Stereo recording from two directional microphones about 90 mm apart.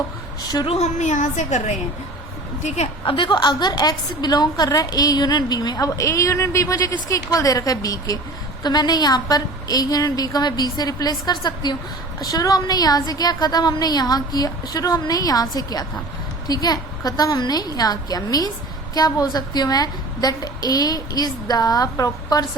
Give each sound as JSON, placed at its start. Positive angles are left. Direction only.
{"t": 0.4, "sound": "a woman's voice", "side_deg": 50}
{"t": 3.1, "sound": "a woman's voice", "side_deg": 65}